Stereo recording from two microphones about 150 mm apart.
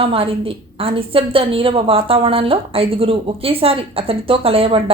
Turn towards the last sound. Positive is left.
turn(degrees=-40)  # may be behind; listen again after turning